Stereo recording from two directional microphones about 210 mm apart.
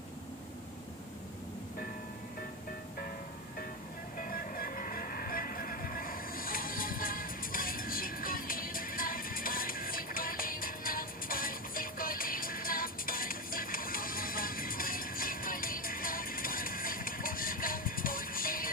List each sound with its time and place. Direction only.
4.2 s music: 45° left (ahead or behind)